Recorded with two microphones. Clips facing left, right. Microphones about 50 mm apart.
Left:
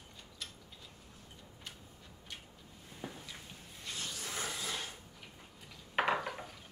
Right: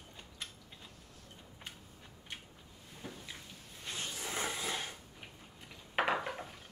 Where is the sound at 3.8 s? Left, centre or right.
Right.